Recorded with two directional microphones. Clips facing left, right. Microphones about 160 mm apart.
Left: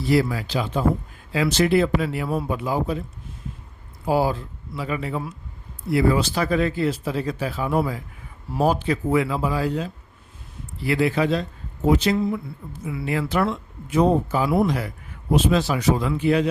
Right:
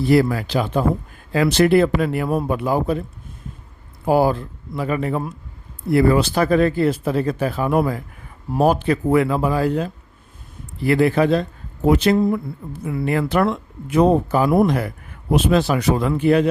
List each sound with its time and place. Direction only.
0.0 s speech: 55° right (ahead or behind)
4.0 s speech: 55° right (ahead or behind)